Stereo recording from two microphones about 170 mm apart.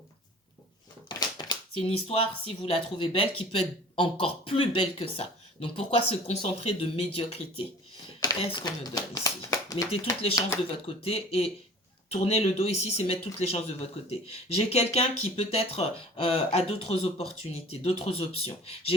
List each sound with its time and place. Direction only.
1.0 s speech: 25° left (ahead or behind)
9.9 s speech: 35° left (ahead or behind)